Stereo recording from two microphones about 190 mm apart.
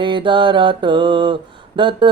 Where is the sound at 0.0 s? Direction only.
25° right (ahead or behind).